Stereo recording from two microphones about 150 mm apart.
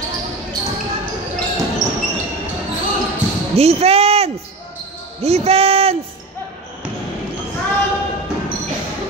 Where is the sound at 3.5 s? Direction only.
45° right (ahead or behind).